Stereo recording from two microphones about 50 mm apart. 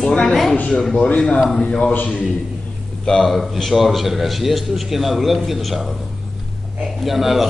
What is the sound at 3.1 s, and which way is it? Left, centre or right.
A man's voice, centre.